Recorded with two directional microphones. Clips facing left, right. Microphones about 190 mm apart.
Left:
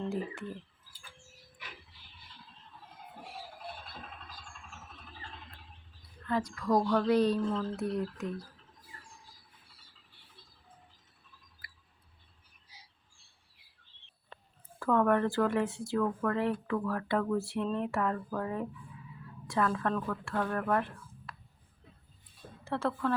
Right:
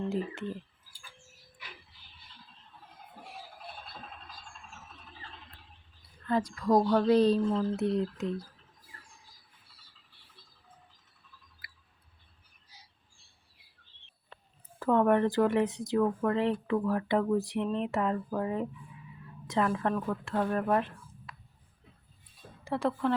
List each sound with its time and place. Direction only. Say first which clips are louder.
0.0 s speech: right 3 dB; 20° right (ahead or behind)
6.2 s speech: right 3 dB; 30° right (ahead or behind)
14.8 s speech: right 2 dB; 20° right (ahead or behind)
22.6 s a woman's voice: right 2 dB; 15° right (ahead or behind)